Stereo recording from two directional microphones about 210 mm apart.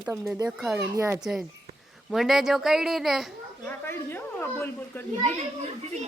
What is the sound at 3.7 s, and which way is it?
A woman's voice, 10° left (ahead or behind).